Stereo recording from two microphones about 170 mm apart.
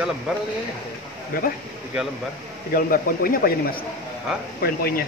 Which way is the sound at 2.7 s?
55° left (ahead or behind).